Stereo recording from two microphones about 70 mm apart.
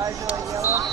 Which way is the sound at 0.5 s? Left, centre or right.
Right.